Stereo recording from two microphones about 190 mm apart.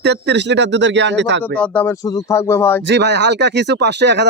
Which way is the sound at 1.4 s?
5° left (ahead or behind).